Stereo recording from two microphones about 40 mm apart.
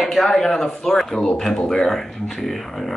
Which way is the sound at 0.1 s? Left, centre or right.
Centre.